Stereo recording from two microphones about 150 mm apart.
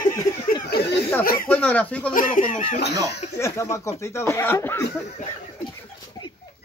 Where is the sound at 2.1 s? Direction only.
60° left (ahead or behind).